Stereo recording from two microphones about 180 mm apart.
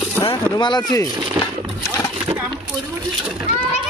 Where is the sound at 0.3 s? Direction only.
25° left (ahead or behind).